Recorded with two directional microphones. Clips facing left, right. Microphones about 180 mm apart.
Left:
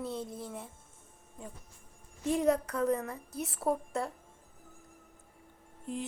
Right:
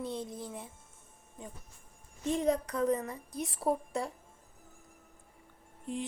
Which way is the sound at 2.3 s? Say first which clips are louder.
Left 2 dB; 10° left (ahead or behind).